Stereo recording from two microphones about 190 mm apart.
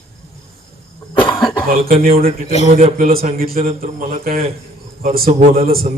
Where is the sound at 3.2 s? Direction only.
50° right (ahead or behind).